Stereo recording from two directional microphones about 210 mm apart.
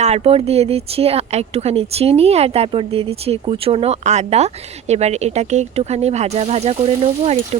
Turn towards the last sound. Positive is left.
turn(degrees=-30)  # may be behind; listen again after turning